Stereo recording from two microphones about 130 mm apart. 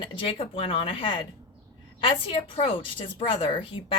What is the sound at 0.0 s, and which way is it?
A woman's voice, 40° left (ahead or behind).